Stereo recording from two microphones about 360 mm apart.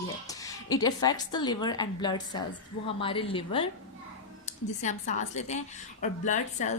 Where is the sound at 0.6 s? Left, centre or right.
Centre.